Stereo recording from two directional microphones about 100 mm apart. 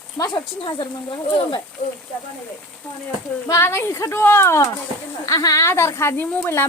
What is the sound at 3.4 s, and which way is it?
Speech, 25° left (ahead or behind).